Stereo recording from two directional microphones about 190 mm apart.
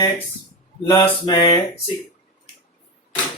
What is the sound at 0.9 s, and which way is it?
Mantra, 15° left (ahead or behind).